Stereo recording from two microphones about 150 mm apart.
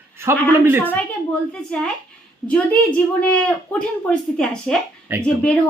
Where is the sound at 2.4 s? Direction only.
10° left (ahead or behind).